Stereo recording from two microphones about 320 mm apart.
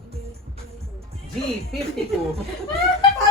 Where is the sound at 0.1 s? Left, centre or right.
Centre.